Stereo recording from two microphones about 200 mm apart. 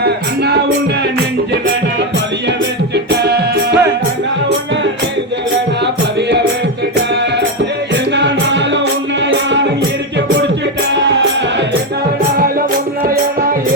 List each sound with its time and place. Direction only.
0.0 s music: 55° right (ahead or behind)
2.9 s music: 55° right (ahead or behind)
8.1 s music: 60° right (ahead or behind)
10.9 s music: 60° right (ahead or behind)